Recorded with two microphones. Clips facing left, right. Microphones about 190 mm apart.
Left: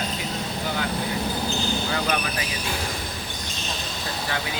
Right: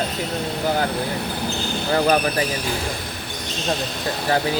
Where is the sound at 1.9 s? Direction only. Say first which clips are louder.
Right 8 dB; 40° right (ahead or behind).